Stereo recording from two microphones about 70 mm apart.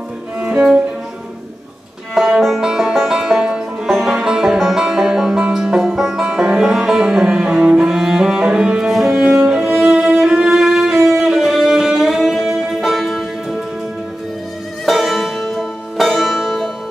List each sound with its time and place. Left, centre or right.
0.4 s cello: centre
2.1 s music: centre
14.9 s music: centre